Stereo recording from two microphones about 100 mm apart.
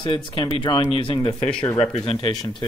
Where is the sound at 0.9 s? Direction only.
65° left (ahead or behind).